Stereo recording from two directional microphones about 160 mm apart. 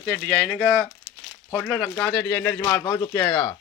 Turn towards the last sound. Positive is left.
turn(degrees=25)  # may be behind; listen again after turning